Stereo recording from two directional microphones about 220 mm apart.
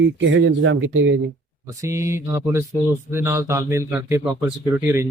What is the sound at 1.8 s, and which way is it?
A man's voice, 15° right (ahead or behind).